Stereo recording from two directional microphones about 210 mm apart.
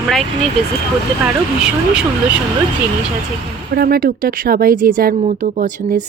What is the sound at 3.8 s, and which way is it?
Speech, 45° right (ahead or behind).